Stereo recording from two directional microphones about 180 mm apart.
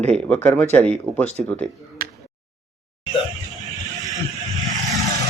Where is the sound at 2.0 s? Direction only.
55° right (ahead or behind).